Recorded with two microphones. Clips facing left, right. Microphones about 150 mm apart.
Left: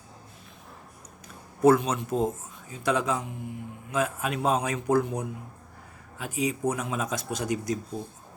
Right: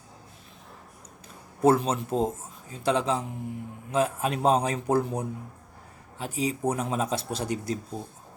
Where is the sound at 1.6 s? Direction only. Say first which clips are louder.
Left 1 dB; 30° right (ahead or behind).